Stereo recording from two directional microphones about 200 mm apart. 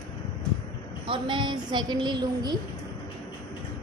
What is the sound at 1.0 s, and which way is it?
A woman's voice, 25° right (ahead or behind).